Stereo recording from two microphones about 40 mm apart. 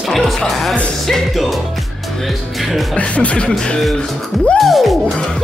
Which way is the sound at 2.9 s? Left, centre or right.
Left.